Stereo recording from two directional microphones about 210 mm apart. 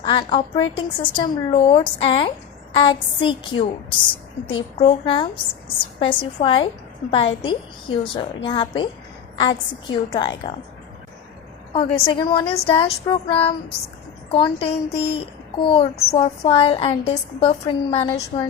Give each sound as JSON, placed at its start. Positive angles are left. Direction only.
{"t": 0.0, "sound": "speech", "side_deg": 20}
{"t": 11.7, "sound": "speech", "side_deg": 20}